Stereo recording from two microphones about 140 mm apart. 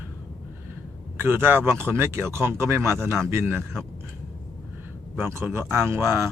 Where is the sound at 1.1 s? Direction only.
15° right (ahead or behind).